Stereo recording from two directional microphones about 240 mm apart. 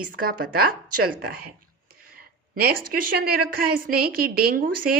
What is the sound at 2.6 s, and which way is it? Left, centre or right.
Speech, right.